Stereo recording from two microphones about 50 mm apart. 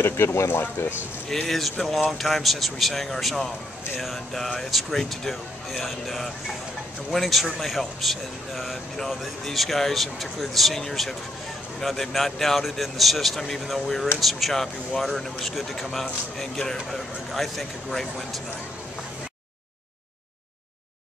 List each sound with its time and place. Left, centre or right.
0.0 s speech: left
0.5 s speech: left
1.3 s speech: centre